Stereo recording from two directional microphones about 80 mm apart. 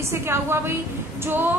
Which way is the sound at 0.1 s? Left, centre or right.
Right.